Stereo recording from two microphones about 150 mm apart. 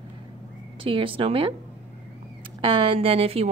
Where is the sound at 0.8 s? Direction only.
35° right (ahead or behind).